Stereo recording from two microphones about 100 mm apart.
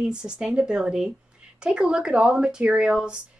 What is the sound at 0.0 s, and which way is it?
Speech, 10° right (ahead or behind).